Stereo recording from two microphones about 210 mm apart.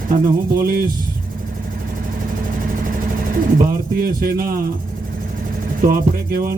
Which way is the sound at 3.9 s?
45° right (ahead or behind).